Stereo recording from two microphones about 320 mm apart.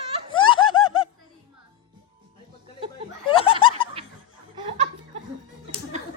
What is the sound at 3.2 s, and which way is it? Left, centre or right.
Snicker, centre.